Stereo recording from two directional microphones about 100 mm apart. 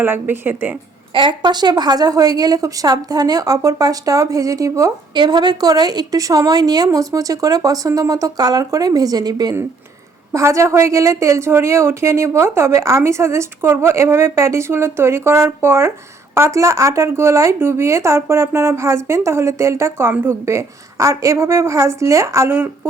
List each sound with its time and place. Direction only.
0.0 s speech: 20° right (ahead or behind)
1.1 s a woman's voice: 55° right (ahead or behind); by 4.9 s 35° right (ahead or behind)
5.1 s a woman's voice: 50° right (ahead or behind)
10.3 s speech: 30° right (ahead or behind)